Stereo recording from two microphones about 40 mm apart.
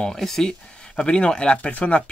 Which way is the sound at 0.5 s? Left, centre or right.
Left.